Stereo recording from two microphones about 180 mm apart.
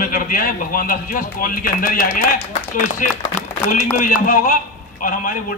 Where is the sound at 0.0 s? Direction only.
50° left (ahead or behind).